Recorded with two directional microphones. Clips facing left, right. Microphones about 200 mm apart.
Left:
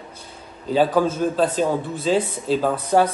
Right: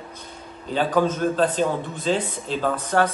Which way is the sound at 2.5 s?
5° left (ahead or behind).